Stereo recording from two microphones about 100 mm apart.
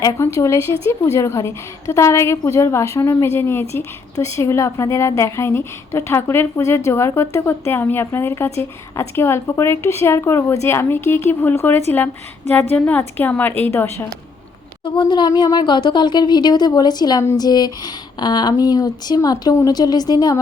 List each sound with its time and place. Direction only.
0.0 s a woman's voice: 30° left (ahead or behind)
14.8 s speech: 50° left (ahead or behind)